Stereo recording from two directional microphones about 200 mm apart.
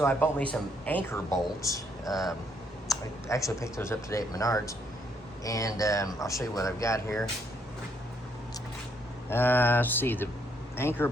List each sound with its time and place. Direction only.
0.0 s speech: 10° left (ahead or behind)
9.3 s speech: 10° left (ahead or behind)